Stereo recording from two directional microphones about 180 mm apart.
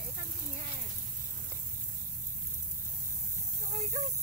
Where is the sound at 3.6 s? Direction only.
45° right (ahead or behind).